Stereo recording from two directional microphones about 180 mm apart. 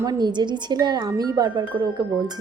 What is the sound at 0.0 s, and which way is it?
Speech, 20° right (ahead or behind).